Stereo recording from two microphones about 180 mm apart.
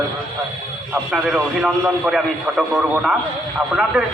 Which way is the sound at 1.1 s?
Centre (ahead or behind).